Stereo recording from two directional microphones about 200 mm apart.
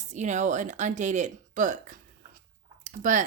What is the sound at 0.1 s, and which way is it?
Speech, 35° right (ahead or behind).